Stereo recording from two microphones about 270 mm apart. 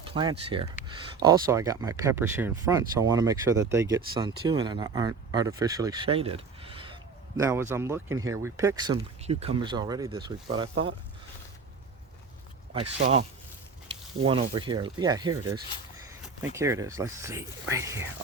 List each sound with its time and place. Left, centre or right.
0.0 s speech: centre
13.0 s speech: right
14.3 s speech: centre